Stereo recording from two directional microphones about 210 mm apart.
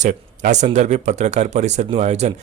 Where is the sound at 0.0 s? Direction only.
35° right (ahead or behind).